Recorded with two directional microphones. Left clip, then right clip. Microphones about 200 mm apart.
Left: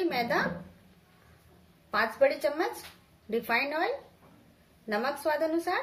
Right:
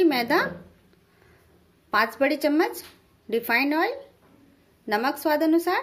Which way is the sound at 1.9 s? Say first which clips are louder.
Right 3 dB; 50° right (ahead or behind).